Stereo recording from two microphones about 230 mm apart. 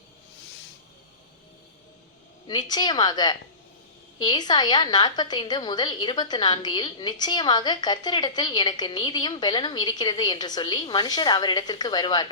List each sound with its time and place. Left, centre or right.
2.5 s a woman's voice: centre